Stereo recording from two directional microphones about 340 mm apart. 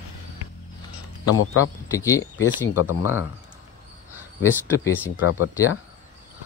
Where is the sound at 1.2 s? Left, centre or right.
Left.